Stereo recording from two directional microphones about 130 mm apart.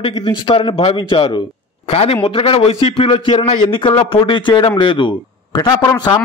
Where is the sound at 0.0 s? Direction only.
45° left (ahead or behind).